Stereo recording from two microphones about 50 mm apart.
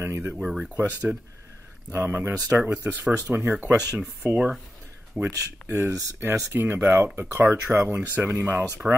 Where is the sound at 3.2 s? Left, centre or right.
Right.